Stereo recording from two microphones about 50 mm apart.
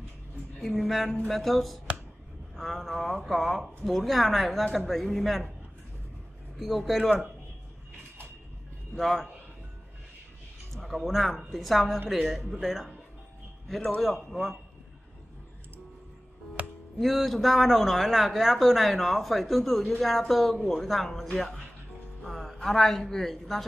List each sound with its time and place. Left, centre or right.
0.6 s a man's voice: centre
6.5 s a man's voice: centre
8.9 s a man's voice: centre
10.7 s a man's voice: centre
14.0 s a man's voice: centre
16.6 s music: right
17.0 s a man's voice: centre